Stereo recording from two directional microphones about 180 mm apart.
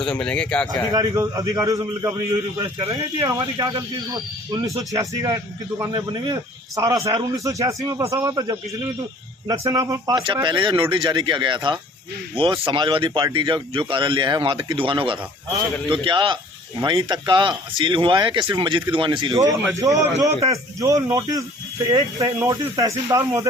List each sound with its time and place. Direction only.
0.0 s speech: 5° left (ahead or behind)
0.9 s a man's voice: 20° right (ahead or behind)